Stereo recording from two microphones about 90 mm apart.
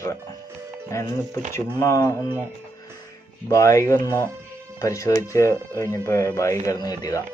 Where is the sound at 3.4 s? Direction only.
35° left (ahead or behind).